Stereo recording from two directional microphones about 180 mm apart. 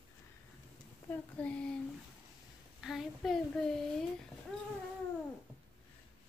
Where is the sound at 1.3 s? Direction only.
5° left (ahead or behind).